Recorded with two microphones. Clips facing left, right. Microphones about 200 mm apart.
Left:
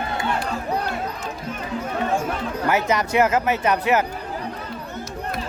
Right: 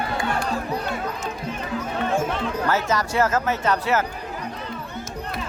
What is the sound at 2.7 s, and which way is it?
Speech, 20° left (ahead or behind).